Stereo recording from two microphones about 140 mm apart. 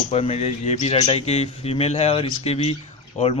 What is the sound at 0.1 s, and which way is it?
Speech, 45° left (ahead or behind).